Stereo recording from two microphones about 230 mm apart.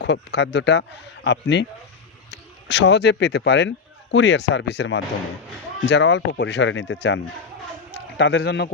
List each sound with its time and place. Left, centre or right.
0.0 s a man's voice: left
8.2 s a man's voice: left